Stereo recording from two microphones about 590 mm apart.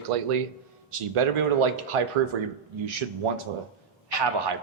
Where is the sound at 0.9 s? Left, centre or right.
Right.